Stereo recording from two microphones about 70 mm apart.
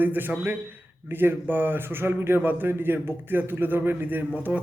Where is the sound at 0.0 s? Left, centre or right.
Right.